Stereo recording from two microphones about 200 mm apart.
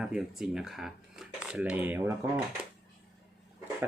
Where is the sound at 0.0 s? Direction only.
5° right (ahead or behind).